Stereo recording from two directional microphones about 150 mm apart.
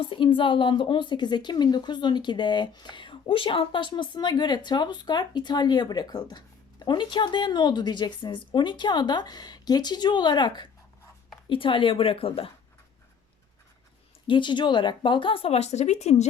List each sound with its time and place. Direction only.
0.0 s a woman's voice: 35° left (ahead or behind)
14.3 s speech: 30° left (ahead or behind); by 16.2 s 50° left (ahead or behind)